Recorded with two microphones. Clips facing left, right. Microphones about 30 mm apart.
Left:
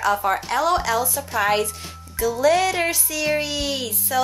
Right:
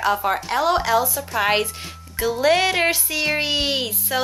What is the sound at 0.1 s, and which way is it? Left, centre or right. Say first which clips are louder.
A woman's voice: even; centre.